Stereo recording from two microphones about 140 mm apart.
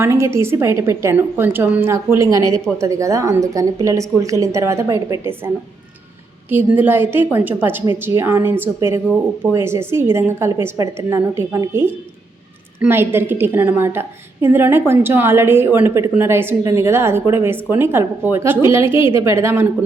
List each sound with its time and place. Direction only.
0.0 s a woman's voice: 20° right (ahead or behind)
6.5 s a woman's voice: 15° right (ahead or behind)